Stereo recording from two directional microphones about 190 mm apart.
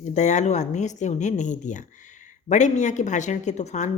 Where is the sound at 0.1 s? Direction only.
40° left (ahead or behind).